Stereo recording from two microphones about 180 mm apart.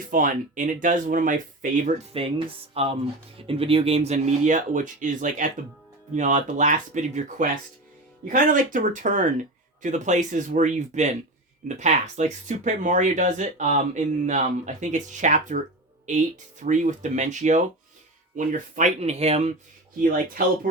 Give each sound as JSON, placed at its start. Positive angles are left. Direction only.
{"t": 0.1, "sound": "speech", "side_deg": -45}
{"t": 2.1, "sound": "speech", "side_deg": -30}